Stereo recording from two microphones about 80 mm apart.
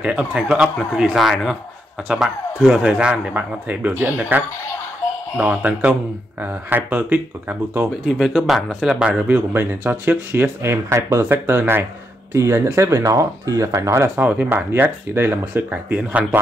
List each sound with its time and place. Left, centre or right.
0.0 s speech: centre
8.0 s speech: centre
9.5 s speech: right
14.2 s speech: right